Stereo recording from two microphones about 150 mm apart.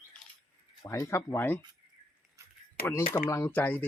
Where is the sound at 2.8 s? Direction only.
90° left.